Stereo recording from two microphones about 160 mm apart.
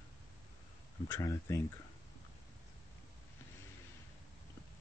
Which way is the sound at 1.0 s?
15° left (ahead or behind).